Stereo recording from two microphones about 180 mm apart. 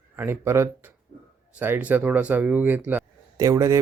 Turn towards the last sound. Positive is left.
turn(degrees=-15)  # may be behind; listen again after turning